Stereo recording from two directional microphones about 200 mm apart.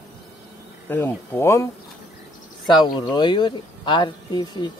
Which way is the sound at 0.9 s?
10° left (ahead or behind).